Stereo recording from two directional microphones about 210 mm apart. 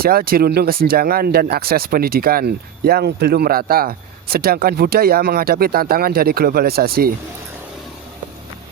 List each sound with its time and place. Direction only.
0.0 s speech: 45° right (ahead or behind)